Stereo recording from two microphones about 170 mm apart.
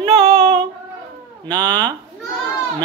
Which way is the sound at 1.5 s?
25° right (ahead or behind).